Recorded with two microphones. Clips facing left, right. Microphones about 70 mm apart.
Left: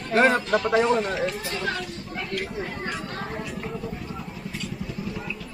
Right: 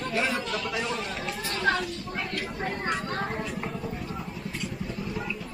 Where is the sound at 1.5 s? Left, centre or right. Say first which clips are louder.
Right 3 dB; right.